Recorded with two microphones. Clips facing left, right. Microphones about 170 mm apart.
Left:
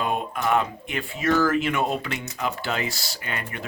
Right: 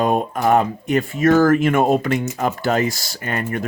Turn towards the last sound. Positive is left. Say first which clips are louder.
# right 9 dB
turn(degrees=-45)  # may be behind; listen again after turning